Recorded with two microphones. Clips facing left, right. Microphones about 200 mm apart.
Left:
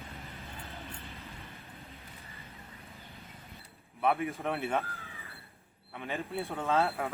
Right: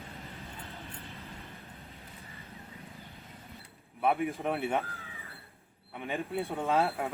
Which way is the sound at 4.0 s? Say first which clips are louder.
Right 1 dB; 15° right (ahead or behind).